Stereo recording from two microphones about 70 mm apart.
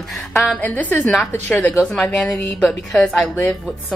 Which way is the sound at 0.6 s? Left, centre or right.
Left.